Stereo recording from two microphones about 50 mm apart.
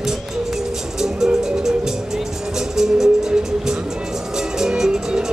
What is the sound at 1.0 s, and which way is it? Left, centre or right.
Music, centre.